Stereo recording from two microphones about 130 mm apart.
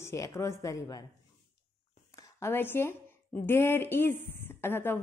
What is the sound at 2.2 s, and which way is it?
A woman's voice, 20° left (ahead or behind).